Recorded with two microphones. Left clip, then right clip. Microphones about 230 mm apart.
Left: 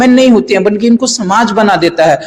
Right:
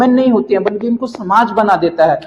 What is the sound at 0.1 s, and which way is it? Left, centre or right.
Speech, left.